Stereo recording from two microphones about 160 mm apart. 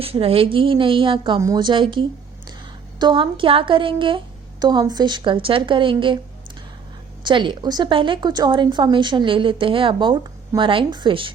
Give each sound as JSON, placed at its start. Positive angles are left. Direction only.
{"t": 0.0, "sound": "a woman's voice", "side_deg": -35}
{"t": 7.3, "sound": "a woman's voice", "side_deg": -30}